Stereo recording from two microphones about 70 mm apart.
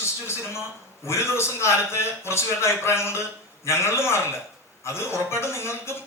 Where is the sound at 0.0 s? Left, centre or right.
Left.